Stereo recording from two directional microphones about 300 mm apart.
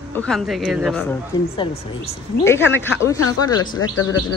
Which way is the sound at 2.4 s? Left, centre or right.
Centre.